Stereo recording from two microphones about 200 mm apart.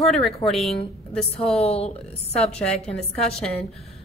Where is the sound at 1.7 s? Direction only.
30° left (ahead or behind).